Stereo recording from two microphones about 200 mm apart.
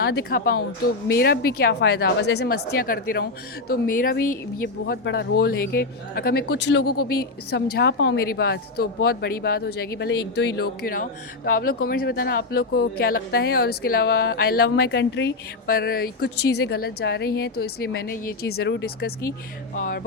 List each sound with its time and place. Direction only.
0.0 s a woman's voice: 55° left (ahead or behind)